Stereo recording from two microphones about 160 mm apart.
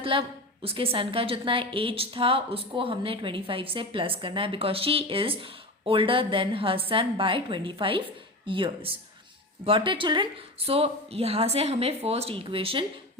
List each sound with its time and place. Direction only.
0.0 s a woman's voice: 35° right (ahead or behind)